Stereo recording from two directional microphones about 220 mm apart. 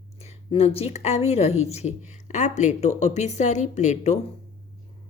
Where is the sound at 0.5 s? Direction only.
25° left (ahead or behind).